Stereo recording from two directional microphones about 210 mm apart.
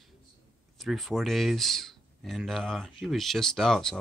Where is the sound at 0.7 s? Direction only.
Centre (ahead or behind).